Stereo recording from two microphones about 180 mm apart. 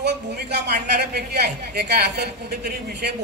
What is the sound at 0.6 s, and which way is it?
A man's voice, 65° right (ahead or behind).